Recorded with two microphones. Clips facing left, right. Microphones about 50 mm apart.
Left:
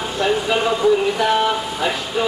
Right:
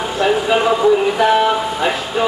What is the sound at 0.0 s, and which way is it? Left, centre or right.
Speech, centre.